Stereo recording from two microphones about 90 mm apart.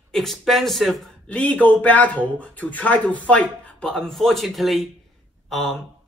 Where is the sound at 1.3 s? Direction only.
15° left (ahead or behind).